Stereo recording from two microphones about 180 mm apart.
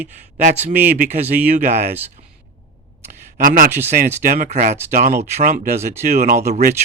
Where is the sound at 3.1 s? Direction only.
50° right (ahead or behind).